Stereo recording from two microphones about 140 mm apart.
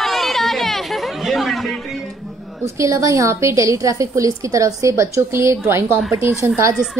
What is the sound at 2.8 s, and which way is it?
A woman's voice, 20° right (ahead or behind).